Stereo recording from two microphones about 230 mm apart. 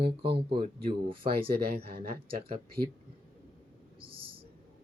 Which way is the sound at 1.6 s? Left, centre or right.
Right.